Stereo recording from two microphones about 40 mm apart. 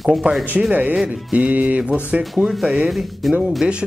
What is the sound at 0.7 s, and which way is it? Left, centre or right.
A man's voice, right.